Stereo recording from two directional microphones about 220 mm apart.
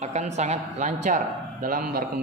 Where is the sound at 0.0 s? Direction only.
30° right (ahead or behind).